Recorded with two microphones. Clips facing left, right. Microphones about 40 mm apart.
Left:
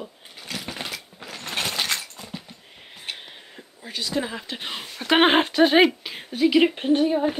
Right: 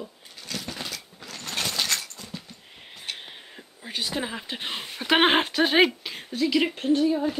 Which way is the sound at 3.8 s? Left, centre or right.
Centre.